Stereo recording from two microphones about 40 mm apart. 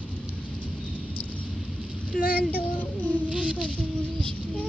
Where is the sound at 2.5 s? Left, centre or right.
Left.